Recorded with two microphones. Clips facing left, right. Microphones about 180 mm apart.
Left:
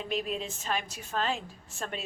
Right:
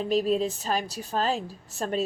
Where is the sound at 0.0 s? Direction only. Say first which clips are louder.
Right 9 dB; 40° right (ahead or behind).